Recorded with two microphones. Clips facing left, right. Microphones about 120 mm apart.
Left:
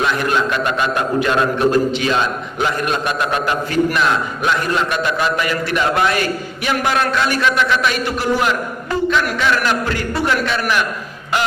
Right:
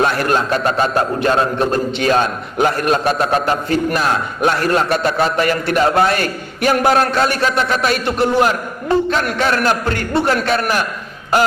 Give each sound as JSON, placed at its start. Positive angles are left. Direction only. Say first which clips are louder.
{"t": 0.0, "sound": "a man's voice", "louder": "right 2 dB", "side_deg": -45}